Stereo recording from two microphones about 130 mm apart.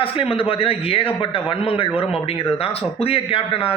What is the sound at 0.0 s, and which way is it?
A man's voice, 45° left (ahead or behind).